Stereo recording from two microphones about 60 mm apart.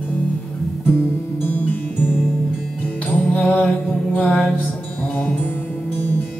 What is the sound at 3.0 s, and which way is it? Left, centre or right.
Music, left.